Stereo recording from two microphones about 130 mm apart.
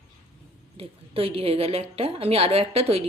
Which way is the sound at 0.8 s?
45° right (ahead or behind).